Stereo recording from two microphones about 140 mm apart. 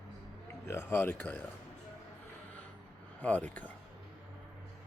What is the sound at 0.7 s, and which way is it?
Speech, 15° left (ahead or behind).